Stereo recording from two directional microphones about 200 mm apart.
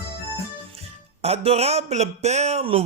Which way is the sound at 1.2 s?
30° right (ahead or behind).